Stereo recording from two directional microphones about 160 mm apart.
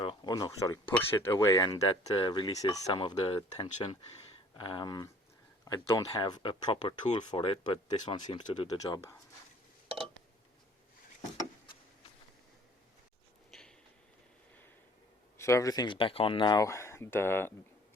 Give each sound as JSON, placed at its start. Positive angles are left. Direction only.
{"t": 0.0, "sound": "speech", "side_deg": 30}
{"t": 13.5, "sound": "a sound", "side_deg": 5}
{"t": 15.4, "sound": "speech", "side_deg": 20}